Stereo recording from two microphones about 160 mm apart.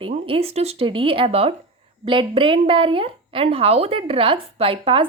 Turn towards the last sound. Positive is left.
turn(degrees=-35)  # may be behind; listen again after turning